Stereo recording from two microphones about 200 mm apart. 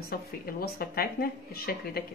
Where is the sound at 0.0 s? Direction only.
50° left (ahead or behind).